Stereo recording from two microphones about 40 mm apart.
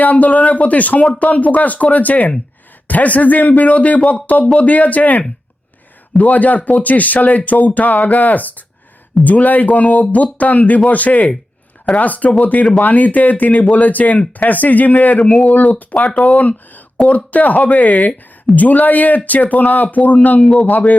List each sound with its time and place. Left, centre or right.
0.0 s speech: left
15.3 s speech: centre
15.7 s speech: left
20.4 s a man's voice: left
20.7 s speech: left